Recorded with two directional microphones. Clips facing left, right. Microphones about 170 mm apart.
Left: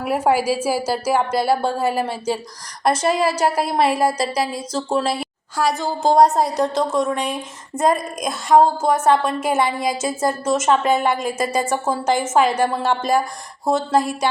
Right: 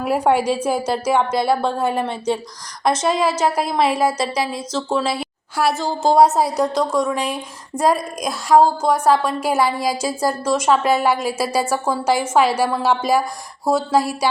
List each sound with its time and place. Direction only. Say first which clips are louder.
0.0 s a woman's voice: right 1 dB; 5° left (ahead or behind)
4.7 s a woman's voice: even; 35° left (ahead or behind)
5.0 s a woman's voice: even; 5° right (ahead or behind)